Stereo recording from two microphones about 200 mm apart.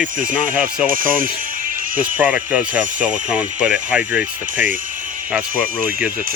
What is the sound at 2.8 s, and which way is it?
Speech, 40° right (ahead or behind).